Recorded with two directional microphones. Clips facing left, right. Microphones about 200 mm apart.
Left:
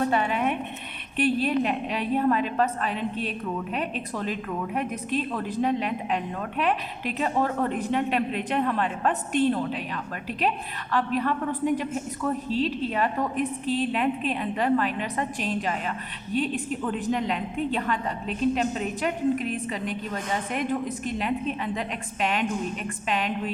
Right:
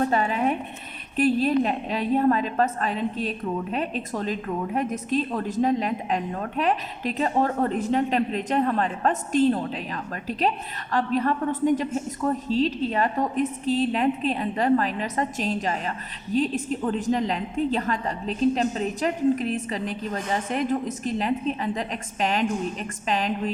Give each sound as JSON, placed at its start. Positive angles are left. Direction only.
{"t": 0.1, "sound": "a woman's voice", "side_deg": -40}